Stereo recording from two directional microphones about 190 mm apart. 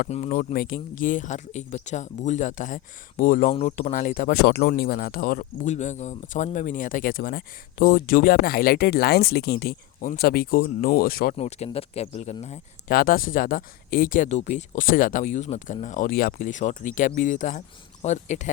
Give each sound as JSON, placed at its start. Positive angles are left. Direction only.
{"t": 0.1, "sound": "speech", "side_deg": 40}
{"t": 11.3, "sound": "speech", "side_deg": 30}
{"t": 12.9, "sound": "speech", "side_deg": 50}